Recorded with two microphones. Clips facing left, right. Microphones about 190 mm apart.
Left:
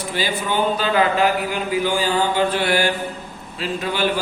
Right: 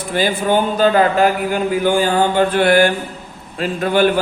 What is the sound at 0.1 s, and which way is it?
Speech, 50° right (ahead or behind).